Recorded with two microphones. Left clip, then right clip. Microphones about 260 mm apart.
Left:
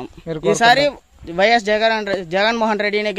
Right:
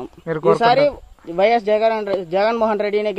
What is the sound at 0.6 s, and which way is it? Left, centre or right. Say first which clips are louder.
A man's voice: left 1 dB; left.